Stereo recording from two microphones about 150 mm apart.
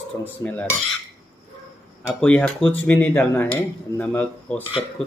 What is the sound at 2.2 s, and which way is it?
Speech, 5° left (ahead or behind).